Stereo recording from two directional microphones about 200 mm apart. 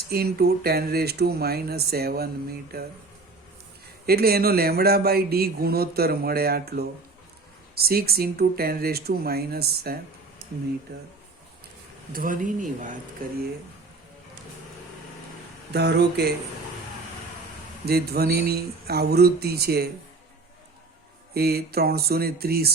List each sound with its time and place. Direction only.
0.1 s a man's voice: 50° right (ahead or behind)
4.0 s a man's voice: 50° right (ahead or behind)
12.1 s a man's voice: 45° right (ahead or behind)
15.7 s a man's voice: 55° right (ahead or behind)
17.8 s a man's voice: 50° right (ahead or behind)
21.3 s a man's voice: 50° right (ahead or behind)